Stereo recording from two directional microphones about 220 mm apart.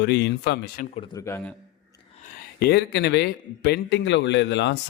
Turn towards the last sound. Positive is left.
turn(degrees=55)  # may be behind; listen again after turning